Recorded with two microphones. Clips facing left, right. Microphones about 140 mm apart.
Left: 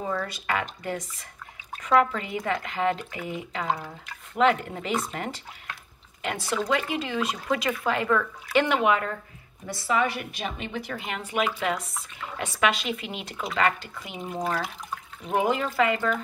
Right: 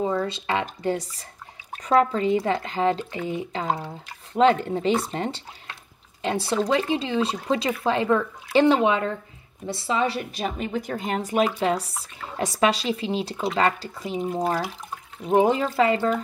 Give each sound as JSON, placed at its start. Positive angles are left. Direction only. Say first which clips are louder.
{"t": 0.0, "sound": "a woman's voice", "louder": "right 5 dB", "side_deg": -25}